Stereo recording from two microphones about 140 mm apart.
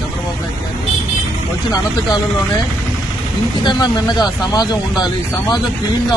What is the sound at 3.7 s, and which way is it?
Speech, 30° left (ahead or behind).